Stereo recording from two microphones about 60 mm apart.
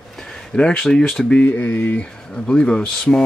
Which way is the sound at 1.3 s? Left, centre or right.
Left.